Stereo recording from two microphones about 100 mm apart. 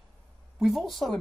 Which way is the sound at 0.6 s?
Centre (ahead or behind).